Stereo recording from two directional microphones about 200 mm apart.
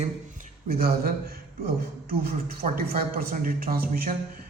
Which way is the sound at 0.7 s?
50° right (ahead or behind).